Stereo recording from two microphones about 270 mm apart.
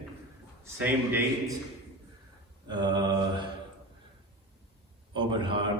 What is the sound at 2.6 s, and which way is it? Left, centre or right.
Mantra, centre.